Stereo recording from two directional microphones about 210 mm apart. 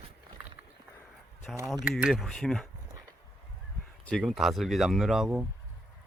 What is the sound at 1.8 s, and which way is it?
Speech, centre (ahead or behind).